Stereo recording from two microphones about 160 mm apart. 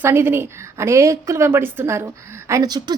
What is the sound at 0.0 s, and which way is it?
A woman's voice, 15° right (ahead or behind).